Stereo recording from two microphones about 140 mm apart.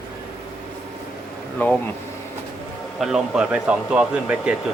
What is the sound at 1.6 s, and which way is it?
Speech, 10° left (ahead or behind).